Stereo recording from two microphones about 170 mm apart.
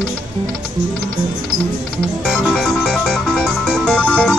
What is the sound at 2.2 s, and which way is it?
Music, 5° left (ahead or behind).